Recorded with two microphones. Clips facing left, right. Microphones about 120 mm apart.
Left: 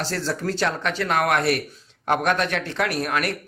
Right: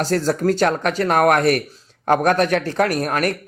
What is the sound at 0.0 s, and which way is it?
Speech, 45° right (ahead or behind).